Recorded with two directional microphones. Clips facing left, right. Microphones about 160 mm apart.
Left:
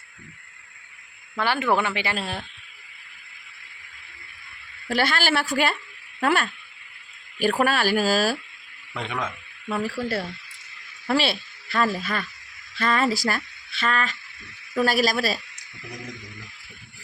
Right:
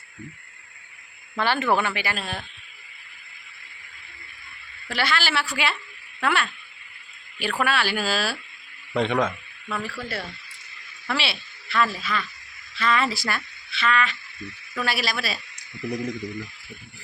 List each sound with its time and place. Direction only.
1.4 s speech: 15° left (ahead or behind); by 2.4 s 30° left (ahead or behind)
4.9 s speech: 45° left (ahead or behind)
7.6 s speech: 45° left (ahead or behind)
9.0 s a man's voice: 35° right (ahead or behind)
9.6 s speech: 40° left (ahead or behind)